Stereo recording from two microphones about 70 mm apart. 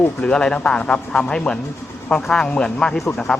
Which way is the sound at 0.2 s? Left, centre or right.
Centre.